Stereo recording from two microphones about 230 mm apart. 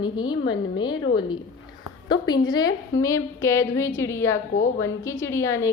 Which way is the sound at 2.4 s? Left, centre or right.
Centre.